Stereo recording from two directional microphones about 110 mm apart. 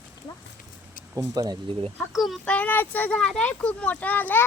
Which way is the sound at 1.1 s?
35° right (ahead or behind).